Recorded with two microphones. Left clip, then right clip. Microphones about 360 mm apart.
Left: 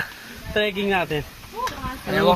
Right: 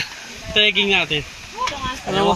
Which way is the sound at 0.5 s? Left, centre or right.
Left.